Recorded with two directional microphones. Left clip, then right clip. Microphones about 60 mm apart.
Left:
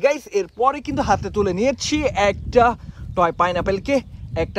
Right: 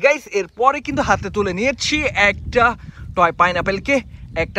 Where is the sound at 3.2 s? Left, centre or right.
Left.